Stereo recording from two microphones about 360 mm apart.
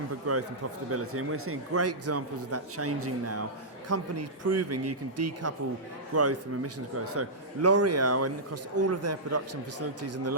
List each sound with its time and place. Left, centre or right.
0.3 s a man's voice: right